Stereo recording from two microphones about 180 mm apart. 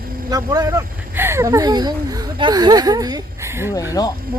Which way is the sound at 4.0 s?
20° left (ahead or behind).